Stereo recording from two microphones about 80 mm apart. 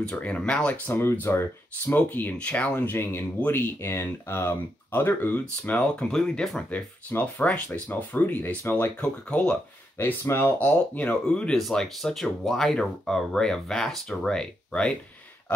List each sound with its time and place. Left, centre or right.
0.0 s speech: centre
0.9 s speech: left; by 6.6 s centre
6.7 s speech: left
9.0 s speech: centre
9.9 s speech: left